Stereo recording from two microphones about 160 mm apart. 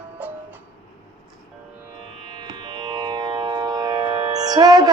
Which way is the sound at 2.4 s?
25° right (ahead or behind).